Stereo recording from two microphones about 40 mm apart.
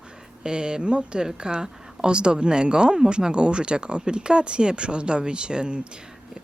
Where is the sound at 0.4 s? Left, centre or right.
Right.